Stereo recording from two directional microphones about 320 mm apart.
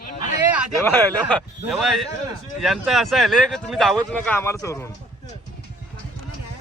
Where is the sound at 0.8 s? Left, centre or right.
Centre.